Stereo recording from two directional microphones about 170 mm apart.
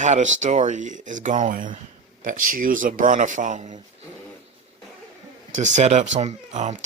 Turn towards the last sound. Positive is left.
turn(degrees=-45)  # may be behind; listen again after turning